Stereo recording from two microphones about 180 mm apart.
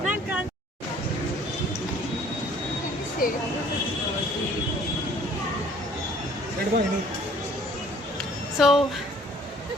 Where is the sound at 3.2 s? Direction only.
50° left (ahead or behind).